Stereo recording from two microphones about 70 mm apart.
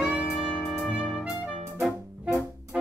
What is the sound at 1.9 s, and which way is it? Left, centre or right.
Music, centre.